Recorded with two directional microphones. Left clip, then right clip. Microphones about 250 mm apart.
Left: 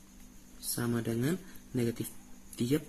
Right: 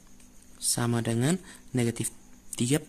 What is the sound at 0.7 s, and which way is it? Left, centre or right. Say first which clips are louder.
Speech: right 3 dB; right.